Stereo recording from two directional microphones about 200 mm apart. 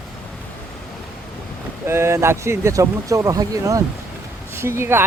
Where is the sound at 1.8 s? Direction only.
10° right (ahead or behind).